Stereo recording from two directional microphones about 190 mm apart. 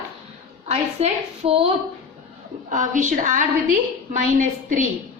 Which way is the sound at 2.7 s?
40° right (ahead or behind).